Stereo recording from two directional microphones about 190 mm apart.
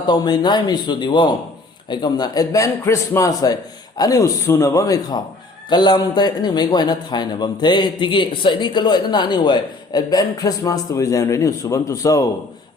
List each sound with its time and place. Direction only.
0.1 s a man's voice: 20° left (ahead or behind)